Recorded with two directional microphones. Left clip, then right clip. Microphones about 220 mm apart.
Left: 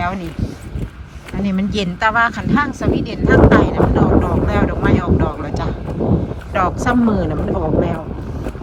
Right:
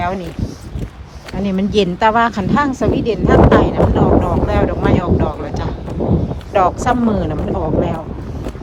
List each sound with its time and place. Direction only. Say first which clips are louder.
1.4 s speech: right 5 dB; 20° right (ahead or behind)